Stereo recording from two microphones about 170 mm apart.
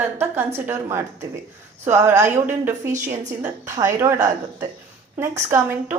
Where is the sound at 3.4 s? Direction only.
15° right (ahead or behind).